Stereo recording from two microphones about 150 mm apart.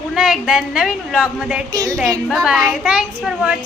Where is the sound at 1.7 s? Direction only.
25° right (ahead or behind).